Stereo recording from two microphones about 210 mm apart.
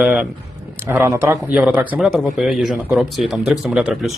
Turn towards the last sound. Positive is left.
turn(degrees=0)  # may be behind; listen again after turning